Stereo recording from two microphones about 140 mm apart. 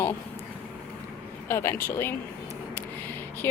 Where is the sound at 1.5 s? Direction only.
15° left (ahead or behind).